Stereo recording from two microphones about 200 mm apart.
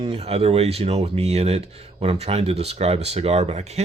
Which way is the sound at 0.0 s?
30° right (ahead or behind).